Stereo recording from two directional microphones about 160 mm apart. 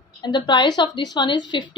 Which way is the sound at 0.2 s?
30° left (ahead or behind).